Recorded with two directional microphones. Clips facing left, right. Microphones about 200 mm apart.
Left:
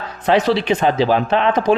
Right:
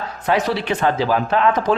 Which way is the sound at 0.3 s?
25° left (ahead or behind).